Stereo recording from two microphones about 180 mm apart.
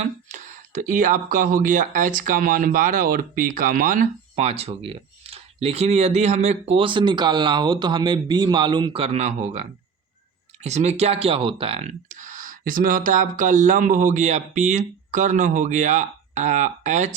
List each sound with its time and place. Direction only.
0.0 s speech: 40° right (ahead or behind)